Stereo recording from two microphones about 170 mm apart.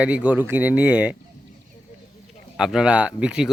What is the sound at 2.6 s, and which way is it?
Speech, 5° right (ahead or behind).